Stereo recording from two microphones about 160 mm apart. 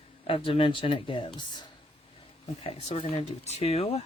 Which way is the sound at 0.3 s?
35° left (ahead or behind).